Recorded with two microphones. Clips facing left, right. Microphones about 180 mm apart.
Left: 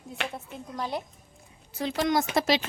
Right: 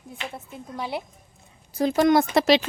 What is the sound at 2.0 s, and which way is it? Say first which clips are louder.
Speech: right 7 dB; 55° right (ahead or behind).